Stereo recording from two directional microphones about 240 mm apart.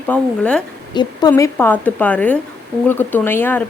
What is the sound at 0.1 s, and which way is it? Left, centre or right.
Speech, centre.